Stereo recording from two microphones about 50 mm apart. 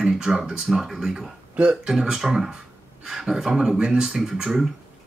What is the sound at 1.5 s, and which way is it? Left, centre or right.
Speech, centre.